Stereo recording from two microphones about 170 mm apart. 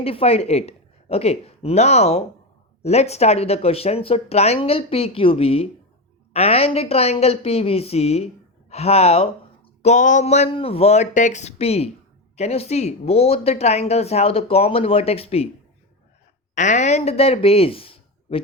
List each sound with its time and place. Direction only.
0.0 s speech: 35° left (ahead or behind)
16.6 s speech: 45° left (ahead or behind)